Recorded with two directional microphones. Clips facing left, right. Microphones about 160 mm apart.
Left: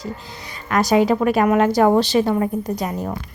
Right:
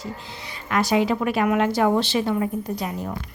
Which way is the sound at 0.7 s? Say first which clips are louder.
Left 4 dB; 40° left (ahead or behind).